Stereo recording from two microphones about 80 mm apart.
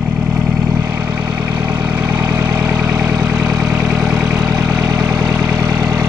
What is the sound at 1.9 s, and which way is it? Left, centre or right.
Vehicle, centre.